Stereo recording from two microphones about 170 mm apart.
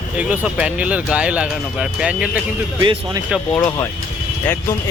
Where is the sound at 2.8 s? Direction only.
25° right (ahead or behind).